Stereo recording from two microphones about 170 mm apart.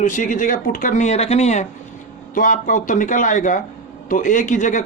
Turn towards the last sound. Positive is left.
turn(degrees=50)  # may be behind; listen again after turning